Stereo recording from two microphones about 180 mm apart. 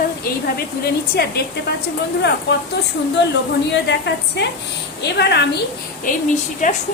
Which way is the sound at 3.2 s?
75° left (ahead or behind).